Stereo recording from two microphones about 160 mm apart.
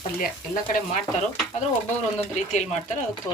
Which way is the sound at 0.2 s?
60° left (ahead or behind).